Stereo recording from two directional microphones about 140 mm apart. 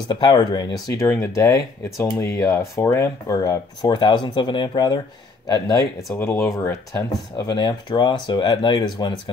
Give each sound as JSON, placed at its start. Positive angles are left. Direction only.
{"t": 0.1, "sound": "speech", "side_deg": 30}
{"t": 7.3, "sound": "speech", "side_deg": 30}